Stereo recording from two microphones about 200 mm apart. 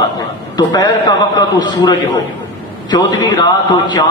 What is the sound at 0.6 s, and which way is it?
A man's voice, 20° left (ahead or behind).